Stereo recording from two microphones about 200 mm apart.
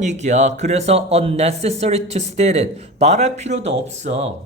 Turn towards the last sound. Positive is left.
turn(degrees=-35)  # may be behind; listen again after turning